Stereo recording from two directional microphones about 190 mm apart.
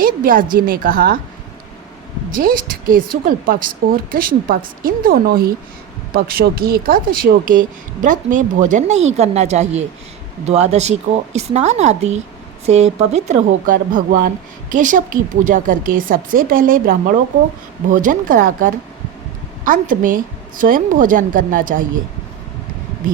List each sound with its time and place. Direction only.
0.0 s a woman's voice: 50° right (ahead or behind)
2.3 s a woman's voice: 45° right (ahead or behind)